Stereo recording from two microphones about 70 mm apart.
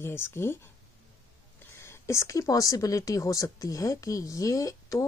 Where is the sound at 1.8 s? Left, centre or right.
Left.